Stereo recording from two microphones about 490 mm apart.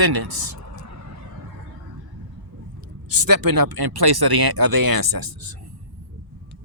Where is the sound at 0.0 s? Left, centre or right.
Right.